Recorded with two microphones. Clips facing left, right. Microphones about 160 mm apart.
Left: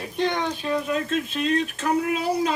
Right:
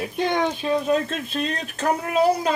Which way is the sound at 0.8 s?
35° right (ahead or behind).